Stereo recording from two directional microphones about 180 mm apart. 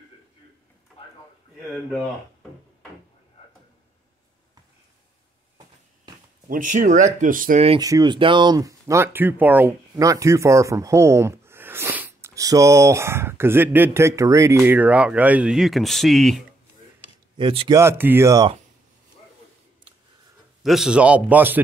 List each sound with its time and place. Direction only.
6.5 s speech: 45° right (ahead or behind)
7.8 s speech: 20° right (ahead or behind); by 16.4 s centre (ahead or behind)
17.4 s speech: 30° right (ahead or behind)
17.7 s speech: 15° right (ahead or behind)
20.6 s speech: centre (ahead or behind)